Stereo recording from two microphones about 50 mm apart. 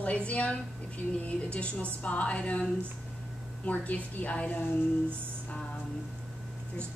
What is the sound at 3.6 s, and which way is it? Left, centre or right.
Speech, left.